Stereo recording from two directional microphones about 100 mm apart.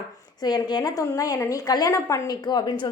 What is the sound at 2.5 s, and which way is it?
Speech, 45° left (ahead or behind).